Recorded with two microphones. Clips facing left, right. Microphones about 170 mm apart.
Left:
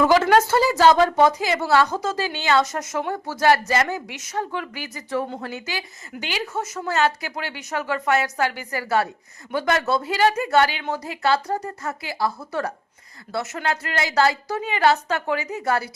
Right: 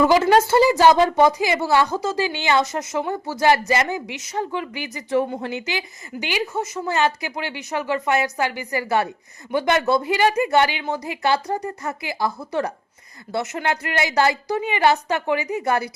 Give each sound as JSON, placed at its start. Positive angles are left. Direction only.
{"t": 0.0, "sound": "a woman's voice", "side_deg": -10}